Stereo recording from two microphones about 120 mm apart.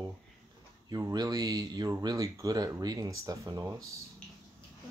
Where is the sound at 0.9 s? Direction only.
30° right (ahead or behind).